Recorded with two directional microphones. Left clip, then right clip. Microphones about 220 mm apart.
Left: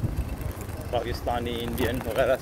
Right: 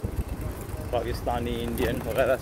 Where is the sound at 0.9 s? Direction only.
5° right (ahead or behind).